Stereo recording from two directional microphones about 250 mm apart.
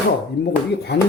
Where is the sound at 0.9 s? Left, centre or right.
Left.